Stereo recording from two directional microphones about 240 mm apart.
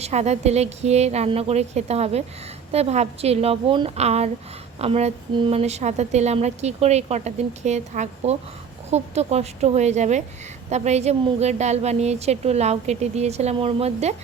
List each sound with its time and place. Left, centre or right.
0.0 s a woman's voice: right